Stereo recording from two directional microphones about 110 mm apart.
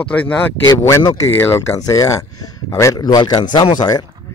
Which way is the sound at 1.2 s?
25° left (ahead or behind).